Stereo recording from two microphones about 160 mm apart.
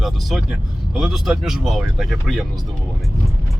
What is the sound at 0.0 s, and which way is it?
Speech, centre (ahead or behind).